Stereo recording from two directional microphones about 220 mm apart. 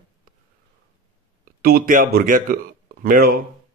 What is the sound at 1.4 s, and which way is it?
A man's voice, 45° right (ahead or behind).